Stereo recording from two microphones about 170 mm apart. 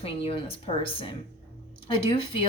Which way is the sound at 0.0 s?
35° left (ahead or behind).